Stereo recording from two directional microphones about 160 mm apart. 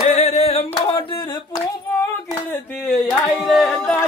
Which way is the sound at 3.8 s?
15° left (ahead or behind).